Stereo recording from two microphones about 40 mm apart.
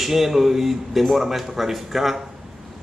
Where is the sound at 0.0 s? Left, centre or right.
Centre.